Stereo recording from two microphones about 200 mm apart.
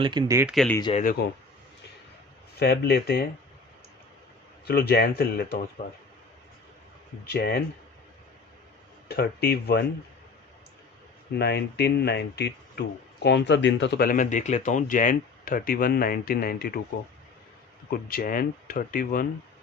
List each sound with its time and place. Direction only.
0.0 s speech: 20° right (ahead or behind)
0.4 s speech: centre (ahead or behind)
0.8 s speech: 25° left (ahead or behind)
2.6 s speech: 50° left (ahead or behind)
4.6 s speech: 55° left (ahead or behind)
5.8 s speech: 40° left (ahead or behind)
7.3 s speech: 50° left (ahead or behind)
9.0 s speech: 50° left (ahead or behind)
11.3 s speech: 55° left (ahead or behind)
17.9 s speech: 45° left (ahead or behind)